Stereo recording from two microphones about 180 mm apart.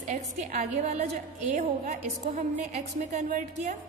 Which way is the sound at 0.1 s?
45° right (ahead or behind).